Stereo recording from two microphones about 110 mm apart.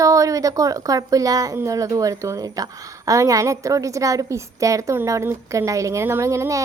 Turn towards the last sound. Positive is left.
turn(degrees=-30)  # may be behind; listen again after turning